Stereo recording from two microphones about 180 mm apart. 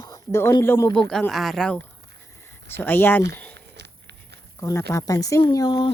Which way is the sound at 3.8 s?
70° right (ahead or behind).